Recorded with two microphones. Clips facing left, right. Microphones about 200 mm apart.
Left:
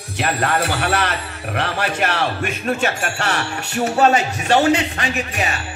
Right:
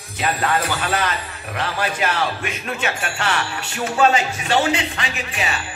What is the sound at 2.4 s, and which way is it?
Speech, 45° left (ahead or behind).